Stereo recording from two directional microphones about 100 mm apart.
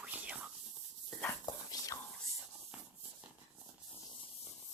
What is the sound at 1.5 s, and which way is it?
Dog, 40° left (ahead or behind).